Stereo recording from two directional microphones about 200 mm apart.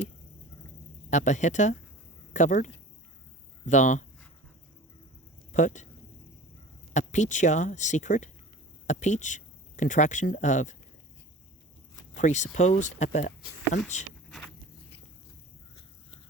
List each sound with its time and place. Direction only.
1.1 s speech: 35° left (ahead or behind)
3.7 s speech: 40° left (ahead or behind)
5.5 s speech: 35° left (ahead or behind)
6.9 s speech: 35° left (ahead or behind)
12.1 s speech: 35° left (ahead or behind)